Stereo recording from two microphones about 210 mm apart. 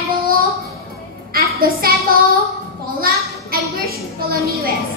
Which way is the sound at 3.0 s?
45° right (ahead or behind).